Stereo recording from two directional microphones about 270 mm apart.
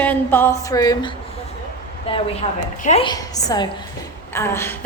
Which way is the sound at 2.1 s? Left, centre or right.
Left.